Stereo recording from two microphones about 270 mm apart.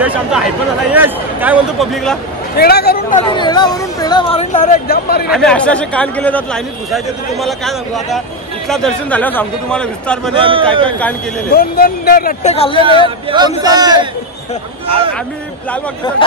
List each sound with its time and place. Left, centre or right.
0.0 s speech: centre
2.5 s speech: left
3.3 s speech: centre; by 5.3 s left
5.3 s speech: centre
10.3 s a man's voice: centre
11.5 s speech: left
13.0 s speech: centre
16.2 s speech: centre